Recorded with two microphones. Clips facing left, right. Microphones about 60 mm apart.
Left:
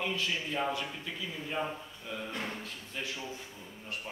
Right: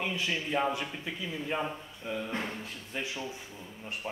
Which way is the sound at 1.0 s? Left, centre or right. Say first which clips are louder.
Right 3 dB; right.